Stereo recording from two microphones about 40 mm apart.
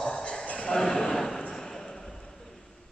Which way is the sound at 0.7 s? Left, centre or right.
Centre.